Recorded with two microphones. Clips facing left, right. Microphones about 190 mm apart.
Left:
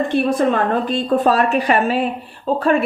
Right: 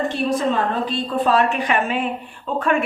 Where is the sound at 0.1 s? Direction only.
55° left (ahead or behind).